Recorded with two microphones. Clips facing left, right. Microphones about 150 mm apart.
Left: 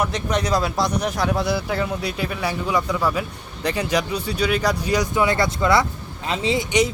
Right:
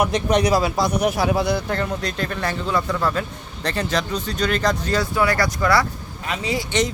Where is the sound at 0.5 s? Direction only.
5° right (ahead or behind).